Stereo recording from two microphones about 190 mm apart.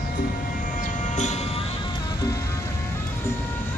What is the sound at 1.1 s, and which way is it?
Music, 40° left (ahead or behind).